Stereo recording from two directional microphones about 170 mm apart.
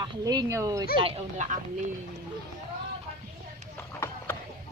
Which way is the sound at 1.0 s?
40° right (ahead or behind).